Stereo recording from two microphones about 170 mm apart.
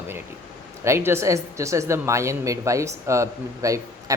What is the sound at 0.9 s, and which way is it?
A woman's voice, 15° right (ahead or behind).